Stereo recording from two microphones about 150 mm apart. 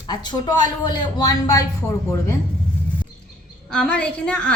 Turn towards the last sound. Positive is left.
turn(degrees=5)  # may be behind; listen again after turning